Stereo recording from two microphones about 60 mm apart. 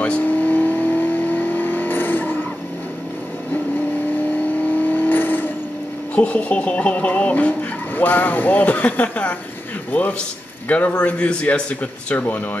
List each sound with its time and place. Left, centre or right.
0.0 s vehicle: left
4.6 s vehicle: left
6.1 s speech: left